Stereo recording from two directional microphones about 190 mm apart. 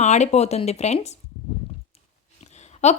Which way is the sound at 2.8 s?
35° left (ahead or behind).